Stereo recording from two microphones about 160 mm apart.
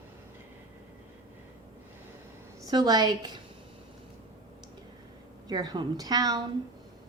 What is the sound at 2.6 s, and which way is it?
Speech, 25° right (ahead or behind).